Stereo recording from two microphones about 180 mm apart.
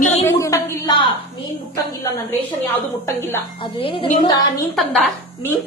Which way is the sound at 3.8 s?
30° left (ahead or behind).